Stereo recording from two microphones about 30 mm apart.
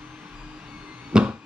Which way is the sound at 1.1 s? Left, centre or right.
Right.